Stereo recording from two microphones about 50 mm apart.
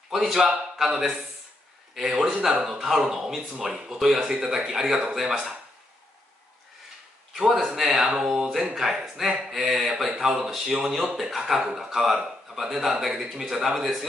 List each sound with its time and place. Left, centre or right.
0.1 s a man's voice: centre
2.1 s speech: right
2.6 s speech: centre
4.3 s speech: centre
4.6 s a man's voice: centre
7.3 s a man's voice: centre